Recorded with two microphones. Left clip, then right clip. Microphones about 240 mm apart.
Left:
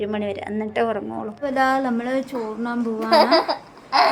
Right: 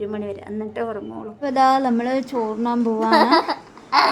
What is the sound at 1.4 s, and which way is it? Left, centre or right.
Speech, right.